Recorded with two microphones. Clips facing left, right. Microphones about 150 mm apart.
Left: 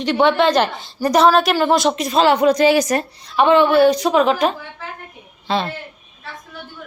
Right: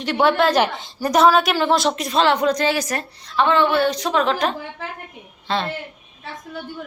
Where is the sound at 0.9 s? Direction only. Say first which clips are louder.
Left 2 dB; centre (ahead or behind).